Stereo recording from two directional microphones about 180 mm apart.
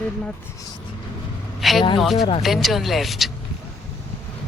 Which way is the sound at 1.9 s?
Centre (ahead or behind).